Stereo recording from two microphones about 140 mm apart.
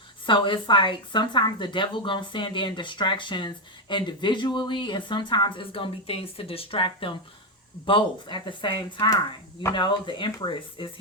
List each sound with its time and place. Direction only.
0.3 s speech: 35° left (ahead or behind)